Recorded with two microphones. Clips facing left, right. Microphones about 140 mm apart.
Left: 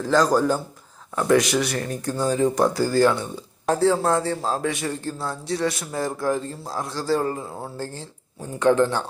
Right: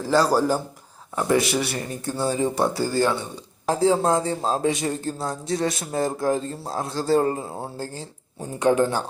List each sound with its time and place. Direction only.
0.0 s speech: 5° right (ahead or behind)
3.0 s speech: 20° right (ahead or behind)
8.4 s speech: 15° right (ahead or behind)